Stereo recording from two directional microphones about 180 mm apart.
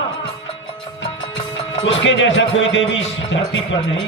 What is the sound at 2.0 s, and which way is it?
Speech, 90° left.